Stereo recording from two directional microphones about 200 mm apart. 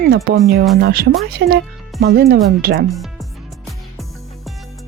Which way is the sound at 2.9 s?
Centre (ahead or behind).